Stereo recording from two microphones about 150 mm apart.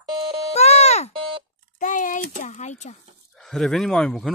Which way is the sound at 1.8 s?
60° left (ahead or behind).